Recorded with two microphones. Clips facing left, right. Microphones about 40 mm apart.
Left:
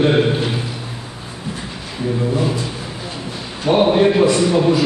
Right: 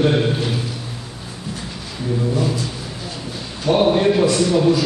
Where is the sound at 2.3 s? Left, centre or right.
Centre.